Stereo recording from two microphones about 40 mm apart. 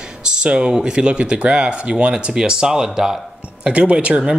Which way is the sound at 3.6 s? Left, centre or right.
Right.